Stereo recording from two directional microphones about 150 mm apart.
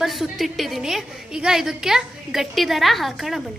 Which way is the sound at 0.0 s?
Centre (ahead or behind).